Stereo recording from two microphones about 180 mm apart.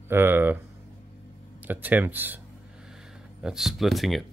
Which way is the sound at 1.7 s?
10° right (ahead or behind).